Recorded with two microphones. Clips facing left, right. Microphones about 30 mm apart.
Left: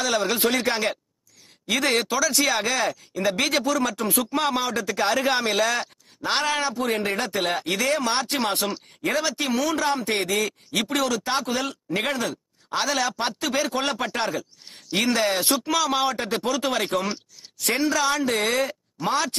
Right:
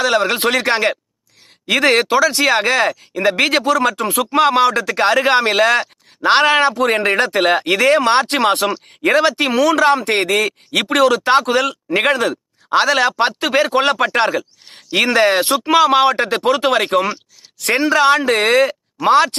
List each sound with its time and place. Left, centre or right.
0.0 s speech: right
3.1 s speech: right